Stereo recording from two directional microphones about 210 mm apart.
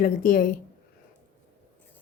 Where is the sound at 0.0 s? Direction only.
40° left (ahead or behind).